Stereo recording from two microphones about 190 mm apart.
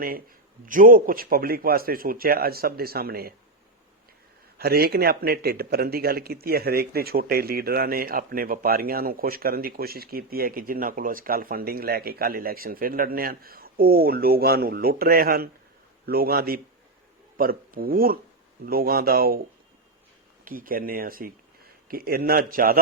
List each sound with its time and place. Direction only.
0.6 s a man's voice: 45° right (ahead or behind)
4.5 s a man's voice: 55° right (ahead or behind)
20.4 s speech: 50° right (ahead or behind)